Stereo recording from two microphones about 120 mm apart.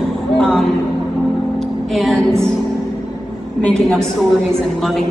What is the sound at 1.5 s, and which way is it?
Music, centre (ahead or behind).